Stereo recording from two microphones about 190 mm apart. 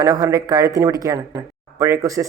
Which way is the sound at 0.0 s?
20° right (ahead or behind).